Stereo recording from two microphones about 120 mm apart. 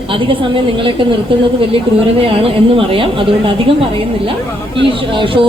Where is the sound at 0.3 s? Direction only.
45° right (ahead or behind).